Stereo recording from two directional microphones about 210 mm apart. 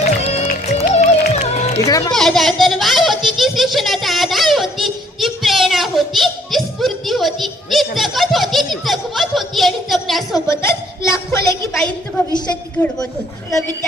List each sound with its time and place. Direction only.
0.2 s music: 30° left (ahead or behind)
1.8 s speech: 15° left (ahead or behind)
2.1 s a sound: centre (ahead or behind)
10.5 s a woman's voice: 15° left (ahead or behind)